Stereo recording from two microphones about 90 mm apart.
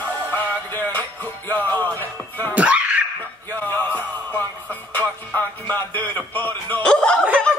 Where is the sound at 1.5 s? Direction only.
20° left (ahead or behind).